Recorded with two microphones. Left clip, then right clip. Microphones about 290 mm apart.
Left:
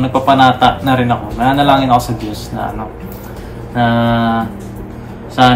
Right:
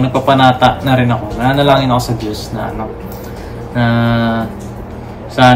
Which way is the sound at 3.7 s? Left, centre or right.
Centre.